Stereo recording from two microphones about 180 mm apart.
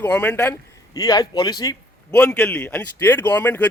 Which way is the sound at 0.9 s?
20° left (ahead or behind).